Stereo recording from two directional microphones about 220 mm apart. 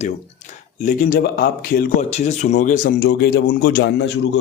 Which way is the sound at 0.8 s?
35° left (ahead or behind).